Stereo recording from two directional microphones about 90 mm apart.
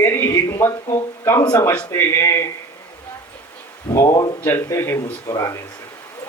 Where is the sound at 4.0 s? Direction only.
35° left (ahead or behind).